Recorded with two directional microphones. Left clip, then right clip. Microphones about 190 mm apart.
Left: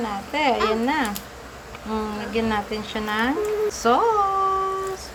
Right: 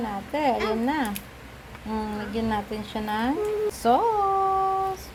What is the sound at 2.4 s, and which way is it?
Speech, 5° right (ahead or behind).